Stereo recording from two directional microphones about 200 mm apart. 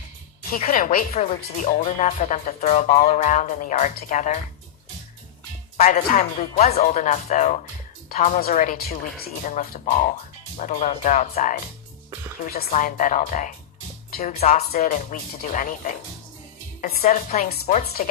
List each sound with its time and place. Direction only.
0.5 s speech: 40° left (ahead or behind)
5.8 s speech: 40° left (ahead or behind)
12.7 s speech: 40° left (ahead or behind)
14.4 s speech: 35° left (ahead or behind)
17.1 s speech: 35° left (ahead or behind)
17.8 s speech: 50° left (ahead or behind)